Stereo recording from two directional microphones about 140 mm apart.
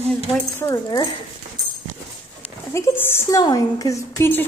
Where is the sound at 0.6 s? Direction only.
25° left (ahead or behind).